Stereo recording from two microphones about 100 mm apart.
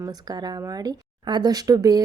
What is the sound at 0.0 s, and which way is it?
Speech, 40° right (ahead or behind).